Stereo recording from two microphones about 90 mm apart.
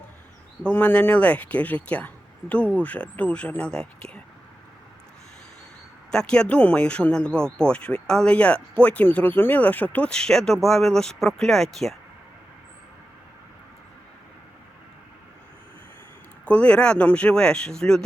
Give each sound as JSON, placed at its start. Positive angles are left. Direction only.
{"t": 0.6, "sound": "speech", "side_deg": 20}
{"t": 6.1, "sound": "speech", "side_deg": 10}
{"t": 10.1, "sound": "speech", "side_deg": 5}
{"t": 16.5, "sound": "speech", "side_deg": 15}